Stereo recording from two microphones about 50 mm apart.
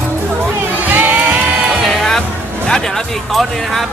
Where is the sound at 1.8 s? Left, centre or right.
Centre.